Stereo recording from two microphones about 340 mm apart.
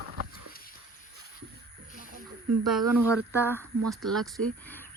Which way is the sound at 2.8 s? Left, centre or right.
Right.